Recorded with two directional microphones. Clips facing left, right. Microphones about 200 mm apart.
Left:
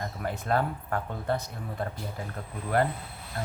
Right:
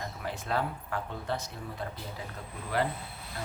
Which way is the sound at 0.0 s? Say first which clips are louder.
Left 4 dB; 50° left (ahead or behind).